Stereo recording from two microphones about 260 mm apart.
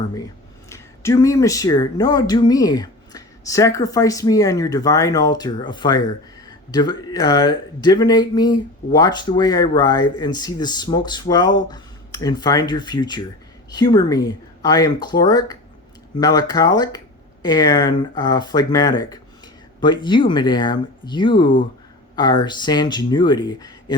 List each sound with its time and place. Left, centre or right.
0.7 s speech: centre